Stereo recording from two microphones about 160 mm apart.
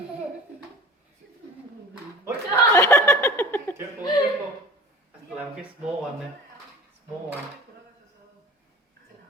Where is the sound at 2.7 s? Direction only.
15° left (ahead or behind).